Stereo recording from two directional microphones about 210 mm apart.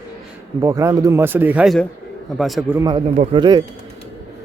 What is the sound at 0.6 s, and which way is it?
A man's voice, 15° right (ahead or behind).